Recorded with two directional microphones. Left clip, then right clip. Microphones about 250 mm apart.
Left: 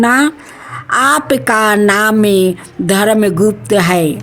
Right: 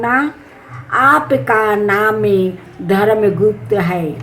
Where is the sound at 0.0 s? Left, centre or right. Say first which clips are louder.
Left 4 dB; left.